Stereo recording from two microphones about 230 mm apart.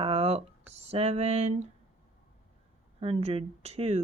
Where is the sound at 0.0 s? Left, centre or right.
Right.